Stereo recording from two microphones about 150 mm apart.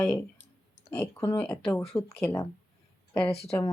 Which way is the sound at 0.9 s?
20° left (ahead or behind).